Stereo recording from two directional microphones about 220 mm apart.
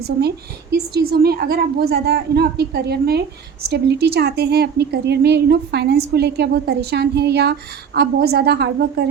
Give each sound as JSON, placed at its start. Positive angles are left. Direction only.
{"t": 0.2, "sound": "a woman's voice", "side_deg": -45}